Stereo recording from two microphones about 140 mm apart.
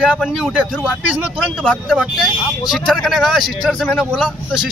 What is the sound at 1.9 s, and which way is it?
Speech, centre (ahead or behind).